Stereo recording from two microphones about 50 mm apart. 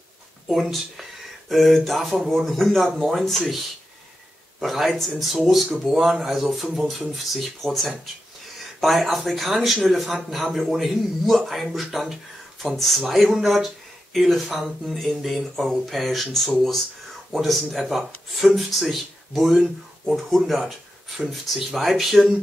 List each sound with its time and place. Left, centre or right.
0.5 s speech: centre